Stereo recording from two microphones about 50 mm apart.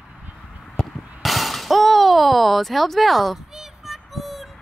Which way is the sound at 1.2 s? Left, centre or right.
Centre.